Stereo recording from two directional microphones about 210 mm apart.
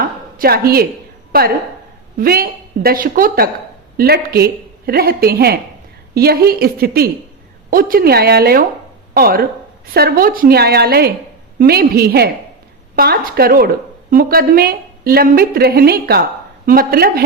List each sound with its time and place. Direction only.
0.3 s a woman's voice: 45° right (ahead or behind)